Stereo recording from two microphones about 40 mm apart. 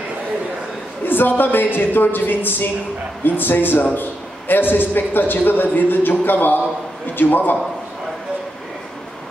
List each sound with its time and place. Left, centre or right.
1.0 s a man's voice: left